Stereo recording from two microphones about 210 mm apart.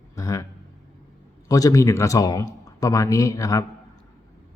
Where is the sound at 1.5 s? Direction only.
15° left (ahead or behind).